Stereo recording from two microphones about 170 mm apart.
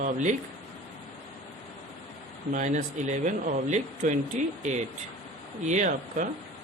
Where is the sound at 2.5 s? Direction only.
50° right (ahead or behind).